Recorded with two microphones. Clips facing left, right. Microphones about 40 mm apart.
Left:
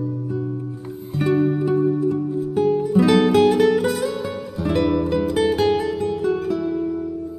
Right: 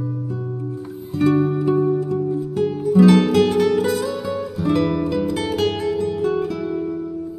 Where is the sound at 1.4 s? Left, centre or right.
Centre.